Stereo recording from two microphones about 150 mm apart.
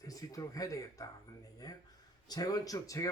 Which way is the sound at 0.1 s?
20° left (ahead or behind).